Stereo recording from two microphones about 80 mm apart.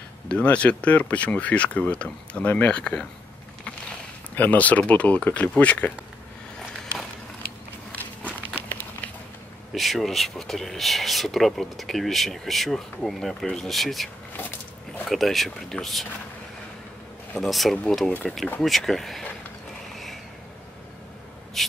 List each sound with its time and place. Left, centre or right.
0.3 s speech: centre
4.4 s speech: centre
9.7 s speech: centre
15.0 s speech: centre
17.4 s speech: centre
21.6 s a sound: centre